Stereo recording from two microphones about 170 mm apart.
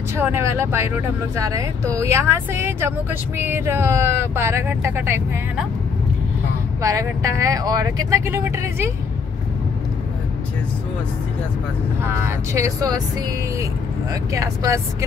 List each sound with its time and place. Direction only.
0.2 s speech: 15° right (ahead or behind)
6.8 s speech: 20° right (ahead or behind)
12.0 s speech: 15° right (ahead or behind)
14.3 s speech: 20° right (ahead or behind)